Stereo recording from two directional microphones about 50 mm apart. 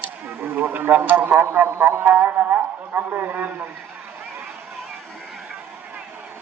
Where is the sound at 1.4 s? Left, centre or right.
Right.